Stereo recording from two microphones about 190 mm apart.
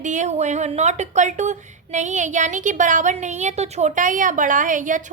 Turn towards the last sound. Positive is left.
turn(degrees=-45)  # may be behind; listen again after turning